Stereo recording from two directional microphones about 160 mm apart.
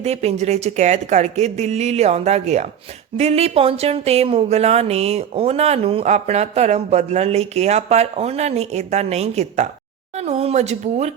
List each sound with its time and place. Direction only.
0.0 s speech: 40° right (ahead or behind)